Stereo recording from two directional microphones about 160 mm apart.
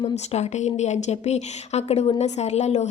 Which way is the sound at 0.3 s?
45° left (ahead or behind).